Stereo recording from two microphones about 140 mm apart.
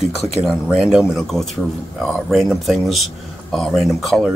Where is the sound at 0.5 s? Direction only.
5° right (ahead or behind).